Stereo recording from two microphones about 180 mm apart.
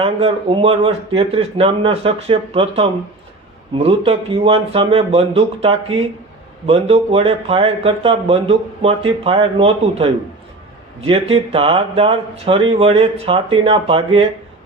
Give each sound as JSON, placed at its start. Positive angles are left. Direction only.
{"t": 0.0, "sound": "speech", "side_deg": -30}
{"t": 3.8, "sound": "speech", "side_deg": -30}